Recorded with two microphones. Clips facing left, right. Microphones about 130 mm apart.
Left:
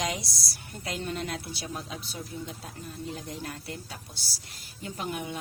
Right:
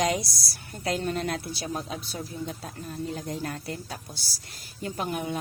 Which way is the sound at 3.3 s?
50° right (ahead or behind).